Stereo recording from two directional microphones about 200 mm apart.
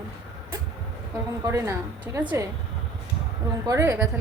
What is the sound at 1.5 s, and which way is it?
Speech, 15° right (ahead or behind).